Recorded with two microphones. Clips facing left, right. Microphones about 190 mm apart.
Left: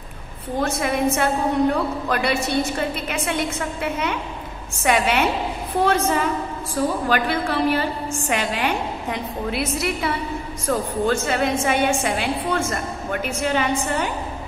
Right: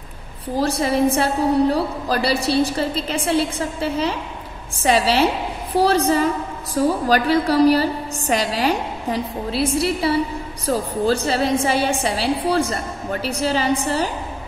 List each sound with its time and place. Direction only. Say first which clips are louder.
0.6 s a woman's voice: right 3 dB; 35° right (ahead or behind)